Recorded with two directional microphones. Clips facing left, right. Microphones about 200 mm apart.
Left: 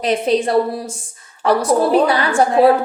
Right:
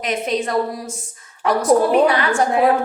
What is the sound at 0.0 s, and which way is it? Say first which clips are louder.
A woman's voice: left 5 dB; 30° left (ahead or behind).